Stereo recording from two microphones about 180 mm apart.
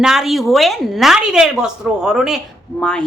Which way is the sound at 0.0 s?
Centre (ahead or behind).